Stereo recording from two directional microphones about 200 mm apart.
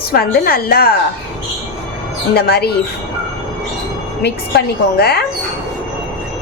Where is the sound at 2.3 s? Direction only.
55° left (ahead or behind).